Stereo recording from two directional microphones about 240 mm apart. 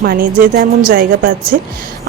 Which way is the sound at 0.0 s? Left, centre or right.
Right.